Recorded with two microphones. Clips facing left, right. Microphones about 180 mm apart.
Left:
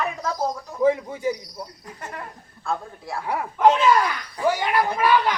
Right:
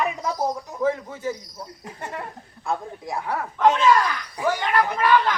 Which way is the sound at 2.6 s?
20° right (ahead or behind).